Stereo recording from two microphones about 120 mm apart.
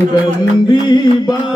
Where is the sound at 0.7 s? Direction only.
35° left (ahead or behind).